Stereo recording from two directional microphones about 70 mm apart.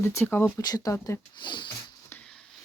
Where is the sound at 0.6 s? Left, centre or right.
Left.